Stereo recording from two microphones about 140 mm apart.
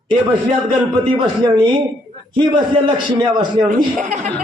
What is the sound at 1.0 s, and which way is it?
A man's voice, 35° right (ahead or behind).